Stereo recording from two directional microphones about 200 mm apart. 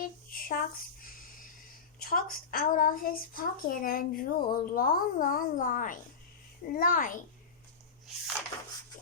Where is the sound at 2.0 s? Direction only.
45° left (ahead or behind).